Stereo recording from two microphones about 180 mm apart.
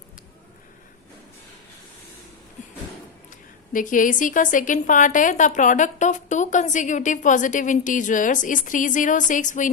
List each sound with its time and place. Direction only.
3.2 s a woman's voice: 50° left (ahead or behind)